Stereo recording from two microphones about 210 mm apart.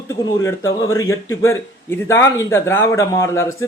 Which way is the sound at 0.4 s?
15° left (ahead or behind).